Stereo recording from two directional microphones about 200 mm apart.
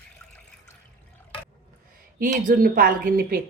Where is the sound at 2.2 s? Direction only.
45° right (ahead or behind).